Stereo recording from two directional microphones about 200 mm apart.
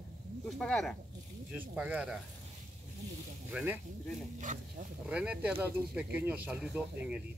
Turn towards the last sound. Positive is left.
turn(degrees=-5)  # may be behind; listen again after turning